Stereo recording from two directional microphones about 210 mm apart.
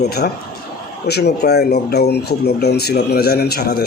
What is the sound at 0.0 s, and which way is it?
Speech, 50° left (ahead or behind).